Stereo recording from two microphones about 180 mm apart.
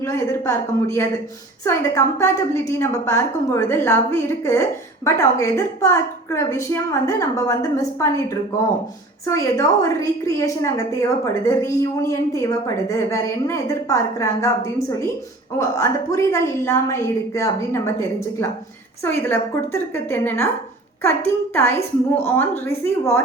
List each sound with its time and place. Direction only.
0.0 s a woman's voice: 15° left (ahead or behind)
9.2 s a woman's voice: 15° left (ahead or behind)
19.0 s a woman's voice: 10° left (ahead or behind)